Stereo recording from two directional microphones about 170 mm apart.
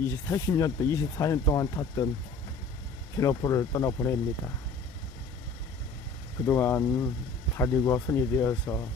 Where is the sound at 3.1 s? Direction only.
20° left (ahead or behind).